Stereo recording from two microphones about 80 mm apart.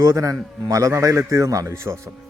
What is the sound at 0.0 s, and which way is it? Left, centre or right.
A man's voice, right.